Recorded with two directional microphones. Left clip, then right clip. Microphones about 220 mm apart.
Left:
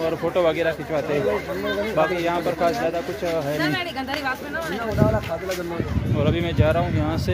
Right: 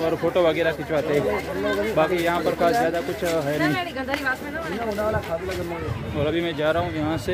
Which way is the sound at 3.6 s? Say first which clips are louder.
Even; 50° left (ahead or behind).